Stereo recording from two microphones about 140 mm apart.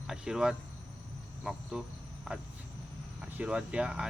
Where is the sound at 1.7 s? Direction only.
5° right (ahead or behind).